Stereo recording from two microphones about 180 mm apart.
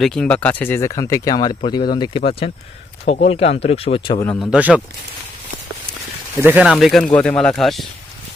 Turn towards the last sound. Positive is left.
turn(degrees=0)  # may be behind; listen again after turning